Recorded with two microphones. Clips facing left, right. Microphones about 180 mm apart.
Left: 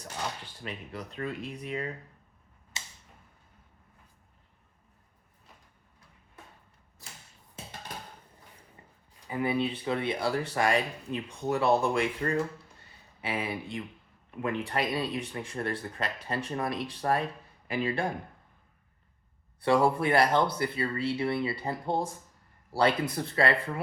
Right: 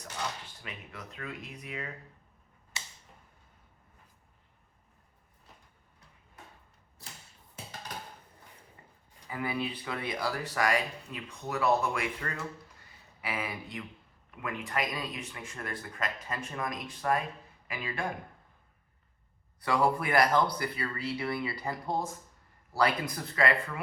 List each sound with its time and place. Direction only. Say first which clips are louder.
0.6 s speech: left 10 dB; 35° left (ahead or behind)
9.3 s speech: left 5 dB; 25° left (ahead or behind)
19.6 s speech: left 4 dB; 30° left (ahead or behind)